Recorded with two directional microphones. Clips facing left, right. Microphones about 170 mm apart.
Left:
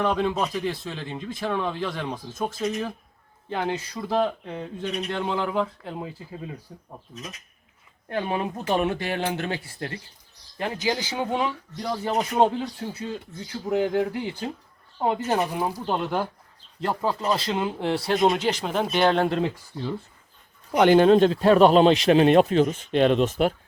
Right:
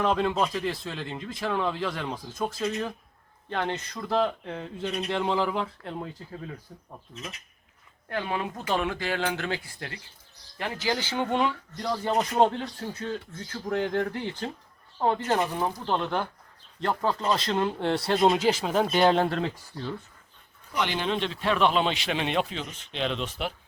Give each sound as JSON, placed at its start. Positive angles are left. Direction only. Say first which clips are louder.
{"t": 0.0, "sound": "speech", "louder": "left 1 dB", "side_deg": 0}
{"t": 8.1, "sound": "speech", "louder": "left 3 dB", "side_deg": 25}
{"t": 19.4, "sound": "speech", "louder": "left 4 dB", "side_deg": 10}
{"t": 20.7, "sound": "speech", "louder": "left 13 dB", "side_deg": 45}